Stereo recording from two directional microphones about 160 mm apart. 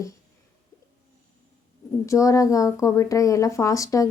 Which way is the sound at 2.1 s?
20° left (ahead or behind).